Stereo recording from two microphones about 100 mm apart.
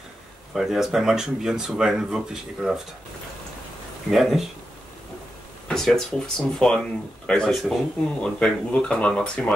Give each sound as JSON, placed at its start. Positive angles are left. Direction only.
{"t": 0.6, "sound": "speech", "side_deg": -5}
{"t": 4.1, "sound": "speech", "side_deg": 0}
{"t": 5.7, "sound": "speech", "side_deg": 5}